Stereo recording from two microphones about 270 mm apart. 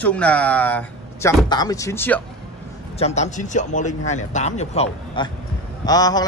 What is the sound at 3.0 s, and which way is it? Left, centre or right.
A man's voice, left.